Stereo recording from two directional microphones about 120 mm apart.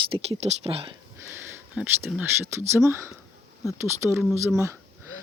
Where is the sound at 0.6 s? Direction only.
50° right (ahead or behind).